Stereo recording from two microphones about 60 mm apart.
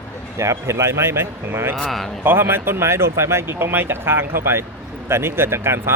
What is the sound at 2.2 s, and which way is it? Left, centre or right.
Speech, right.